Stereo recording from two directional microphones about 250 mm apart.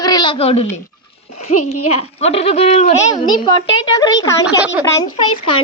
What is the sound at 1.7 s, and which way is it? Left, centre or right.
Speech, left.